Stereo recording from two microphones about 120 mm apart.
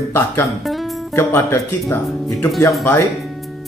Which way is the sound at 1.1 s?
20° left (ahead or behind).